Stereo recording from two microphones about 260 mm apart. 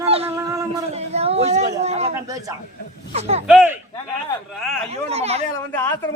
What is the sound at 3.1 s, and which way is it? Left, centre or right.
Speech, right.